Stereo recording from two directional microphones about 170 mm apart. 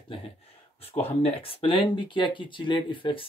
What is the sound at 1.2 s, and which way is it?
Speech, 35° left (ahead or behind).